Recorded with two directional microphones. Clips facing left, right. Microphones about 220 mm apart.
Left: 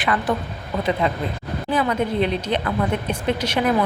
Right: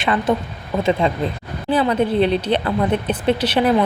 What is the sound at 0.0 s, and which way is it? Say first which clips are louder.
A woman's voice: right 3 dB; 25° right (ahead or behind).